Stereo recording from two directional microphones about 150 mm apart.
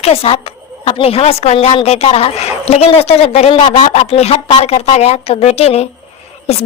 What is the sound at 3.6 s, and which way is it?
Speech, 30° left (ahead or behind).